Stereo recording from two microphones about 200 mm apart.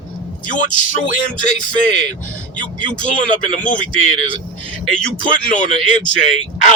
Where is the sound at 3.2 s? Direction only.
40° left (ahead or behind).